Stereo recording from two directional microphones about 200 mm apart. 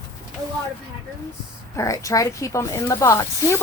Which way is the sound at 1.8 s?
15° left (ahead or behind).